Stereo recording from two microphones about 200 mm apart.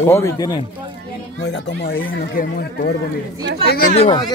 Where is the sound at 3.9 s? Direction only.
25° left (ahead or behind).